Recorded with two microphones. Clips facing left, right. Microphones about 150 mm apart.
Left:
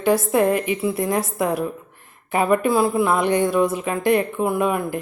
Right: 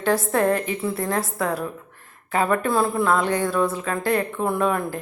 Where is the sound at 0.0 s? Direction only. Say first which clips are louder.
Left 3 dB; 10° left (ahead or behind).